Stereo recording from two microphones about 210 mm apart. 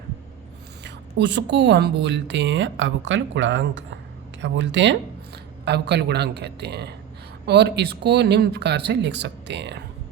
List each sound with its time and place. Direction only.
0.9 s a woman's voice: 55° right (ahead or behind)